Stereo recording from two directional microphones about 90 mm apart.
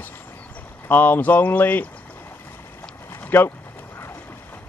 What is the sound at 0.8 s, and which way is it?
Speech, 20° left (ahead or behind).